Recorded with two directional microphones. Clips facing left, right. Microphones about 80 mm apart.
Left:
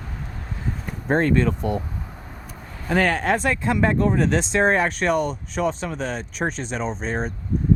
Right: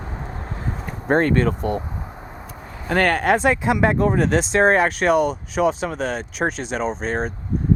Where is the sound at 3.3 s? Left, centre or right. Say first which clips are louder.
Right 4 dB; centre.